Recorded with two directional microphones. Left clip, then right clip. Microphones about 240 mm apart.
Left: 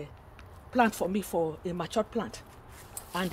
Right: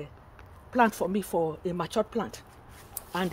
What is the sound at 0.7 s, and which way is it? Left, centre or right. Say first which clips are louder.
Speech: right 2 dB; right.